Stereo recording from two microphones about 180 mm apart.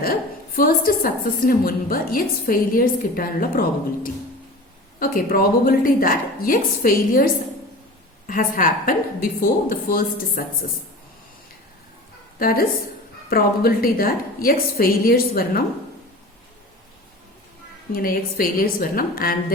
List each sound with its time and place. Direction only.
0.0 s a woman's voice: 55° left (ahead or behind)
4.9 s a woman's voice: 55° left (ahead or behind)
8.3 s a woman's voice: 50° left (ahead or behind)
12.4 s a woman's voice: 55° left (ahead or behind)
17.9 s a woman's voice: 55° left (ahead or behind)